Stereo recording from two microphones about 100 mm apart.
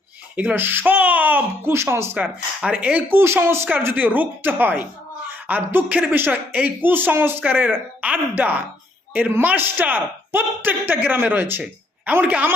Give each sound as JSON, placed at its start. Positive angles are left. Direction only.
{"t": 0.3, "sound": "a woman's voice", "side_deg": -20}